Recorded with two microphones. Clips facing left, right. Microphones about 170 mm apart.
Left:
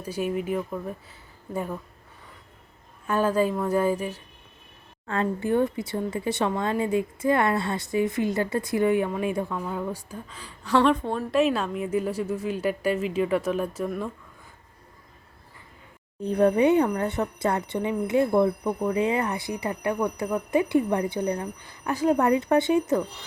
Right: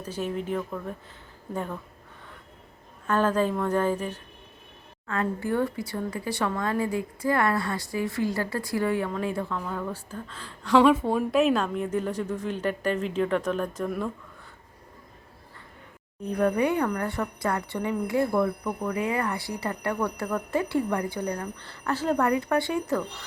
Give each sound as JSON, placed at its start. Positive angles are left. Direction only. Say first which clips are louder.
{"t": 0.0, "sound": "a woman's voice", "louder": "left 3 dB", "side_deg": 10}
{"t": 3.1, "sound": "a woman's voice", "louder": "left 1 dB", "side_deg": 10}
{"t": 5.0, "sound": "speech", "louder": "left 2 dB", "side_deg": 25}
{"t": 10.8, "sound": "a woman's voice", "louder": "right 2 dB", "side_deg": -10}
{"t": 16.2, "sound": "speech", "louder": "left 4 dB", "side_deg": 25}